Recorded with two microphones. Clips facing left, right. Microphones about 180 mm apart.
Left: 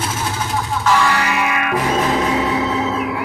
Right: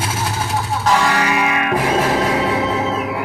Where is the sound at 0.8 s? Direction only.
35° right (ahead or behind).